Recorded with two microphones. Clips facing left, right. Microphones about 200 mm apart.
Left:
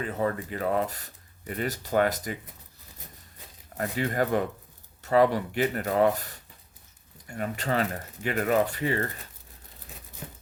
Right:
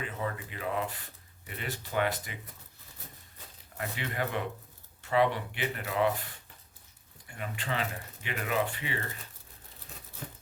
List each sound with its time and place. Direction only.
0.0 s speech: 45° left (ahead or behind)
3.8 s speech: 40° left (ahead or behind)